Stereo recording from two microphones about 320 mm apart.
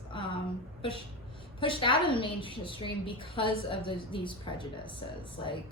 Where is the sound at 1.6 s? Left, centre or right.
Centre.